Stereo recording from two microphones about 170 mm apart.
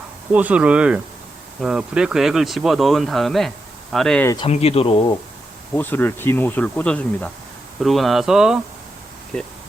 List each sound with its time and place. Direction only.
0.3 s speech: 10° right (ahead or behind)
4.4 s speech: 35° left (ahead or behind)
5.7 s speech: 10° left (ahead or behind)
9.3 s speech: 10° left (ahead or behind)